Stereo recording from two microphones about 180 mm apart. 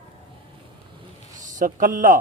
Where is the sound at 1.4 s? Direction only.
45° right (ahead or behind).